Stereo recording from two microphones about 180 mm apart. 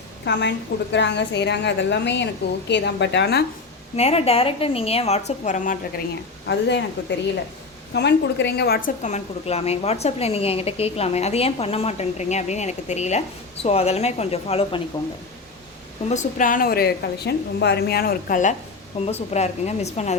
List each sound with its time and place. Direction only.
0.3 s a woman's voice: 75° left (ahead or behind)
3.9 s a woman's voice: 35° left (ahead or behind)
6.5 s a woman's voice: 75° left (ahead or behind)
7.9 s a woman's voice: 70° left (ahead or behind)
9.0 s a woman's voice: 40° left (ahead or behind)
16.0 s a woman's voice: 45° left (ahead or behind)
18.9 s a woman's voice: 35° left (ahead or behind)